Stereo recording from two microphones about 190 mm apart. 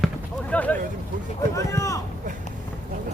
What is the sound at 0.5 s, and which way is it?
Speech, 10° left (ahead or behind).